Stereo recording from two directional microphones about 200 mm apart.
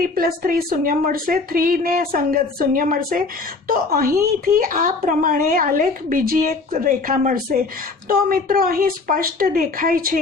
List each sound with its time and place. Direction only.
0.0 s a woman's voice: 45° right (ahead or behind)